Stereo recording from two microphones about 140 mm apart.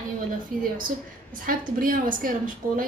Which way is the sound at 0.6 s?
80° right.